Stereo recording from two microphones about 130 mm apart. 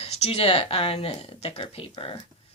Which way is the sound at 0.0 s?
50° left (ahead or behind).